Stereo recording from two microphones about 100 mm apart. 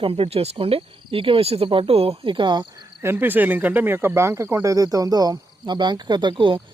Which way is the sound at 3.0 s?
25° right (ahead or behind).